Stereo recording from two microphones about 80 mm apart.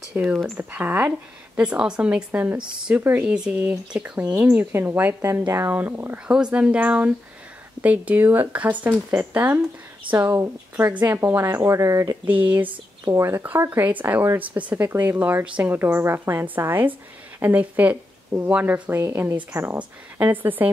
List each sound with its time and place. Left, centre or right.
0.1 s speech: centre
1.6 s speech: centre
4.4 s speech: right
6.1 s speech: centre; by 10.9 s right
10.9 s speech: right
11.1 s speech: right
12.3 s speech: right
13.0 s speech: right
13.7 s speech: right
15.7 s speech: right